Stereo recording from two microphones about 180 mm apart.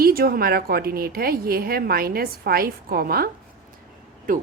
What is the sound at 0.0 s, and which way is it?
A woman's voice, 55° right (ahead or behind).